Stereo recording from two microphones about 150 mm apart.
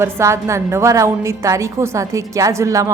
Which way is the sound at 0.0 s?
20° right (ahead or behind).